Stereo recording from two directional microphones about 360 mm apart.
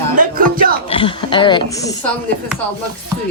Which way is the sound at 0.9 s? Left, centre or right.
Centre.